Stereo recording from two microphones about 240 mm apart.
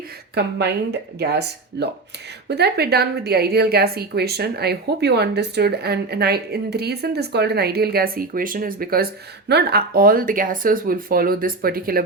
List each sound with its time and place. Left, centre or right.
0.4 s a woman's voice: right